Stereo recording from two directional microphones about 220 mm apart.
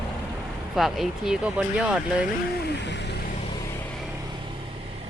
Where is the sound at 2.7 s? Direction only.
50° left (ahead or behind).